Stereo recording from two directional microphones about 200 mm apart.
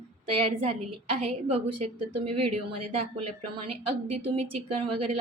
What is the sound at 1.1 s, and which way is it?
A woman's voice, 30° right (ahead or behind).